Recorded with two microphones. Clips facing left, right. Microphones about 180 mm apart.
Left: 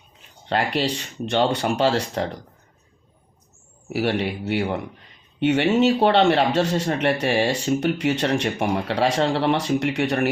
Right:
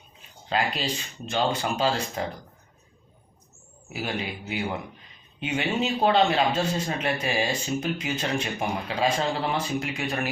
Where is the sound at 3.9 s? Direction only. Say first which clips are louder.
Left 8 dB; 70° left (ahead or behind).